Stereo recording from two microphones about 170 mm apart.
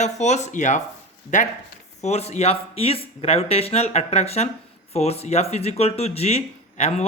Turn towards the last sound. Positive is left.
turn(degrees=40)  # may be behind; listen again after turning